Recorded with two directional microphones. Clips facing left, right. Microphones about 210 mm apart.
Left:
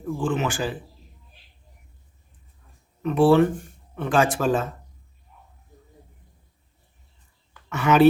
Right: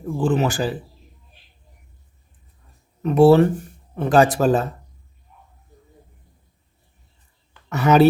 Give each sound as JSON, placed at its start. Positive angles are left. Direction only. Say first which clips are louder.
{"t": 0.2, "sound": "speech", "louder": "right 6 dB", "side_deg": -40}
{"t": 3.0, "sound": "speech", "louder": "right 4 dB", "side_deg": -40}
{"t": 7.7, "sound": "speech", "louder": "right 3 dB", "side_deg": -40}